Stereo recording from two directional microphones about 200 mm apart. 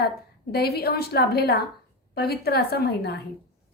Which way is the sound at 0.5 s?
50° left (ahead or behind).